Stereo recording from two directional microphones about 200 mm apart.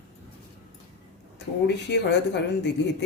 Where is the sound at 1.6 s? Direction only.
55° left (ahead or behind).